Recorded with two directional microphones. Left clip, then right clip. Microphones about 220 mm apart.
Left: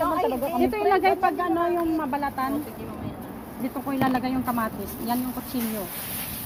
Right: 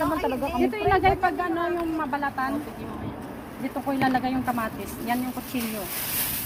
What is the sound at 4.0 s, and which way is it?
Speech, 20° left (ahead or behind).